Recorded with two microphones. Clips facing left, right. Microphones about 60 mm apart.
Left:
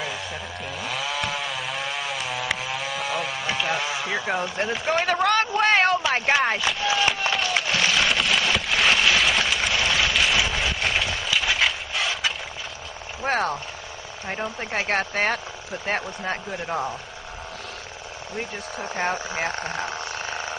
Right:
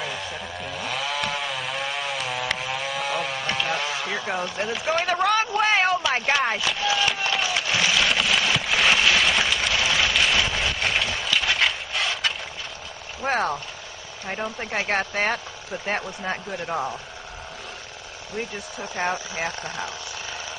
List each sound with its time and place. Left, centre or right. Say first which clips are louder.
0.0 s chainsaw: even; centre
5.5 s speech: left 1 dB; centre
6.9 s printer: left 1 dB; centre
7.7 s a sound: right 1 dB; centre
13.2 s speech: even; centre
19.1 s speech: left 2 dB; left